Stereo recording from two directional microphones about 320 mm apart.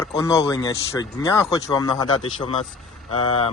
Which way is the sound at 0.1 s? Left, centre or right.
Centre.